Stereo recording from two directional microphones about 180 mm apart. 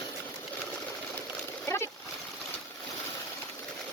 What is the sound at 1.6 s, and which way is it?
Splash, 15° left (ahead or behind).